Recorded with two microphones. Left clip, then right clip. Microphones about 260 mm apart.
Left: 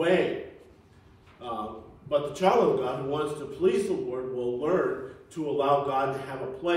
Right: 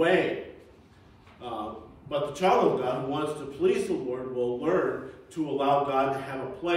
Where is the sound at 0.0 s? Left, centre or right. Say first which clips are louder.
Right 1 dB; centre.